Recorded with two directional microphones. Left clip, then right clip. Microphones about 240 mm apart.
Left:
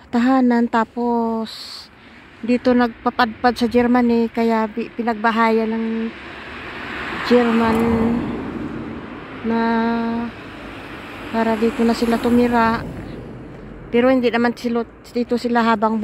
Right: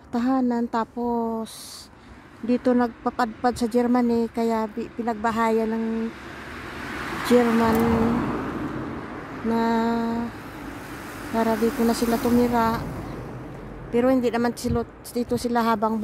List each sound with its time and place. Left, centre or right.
0.1 s speech: centre
6.8 s a sound: right
7.6 s speech: centre
8.3 s vehicle: left
9.5 s speech: centre
11.5 s speech: right
12.1 s speech: centre
13.9 s speech: centre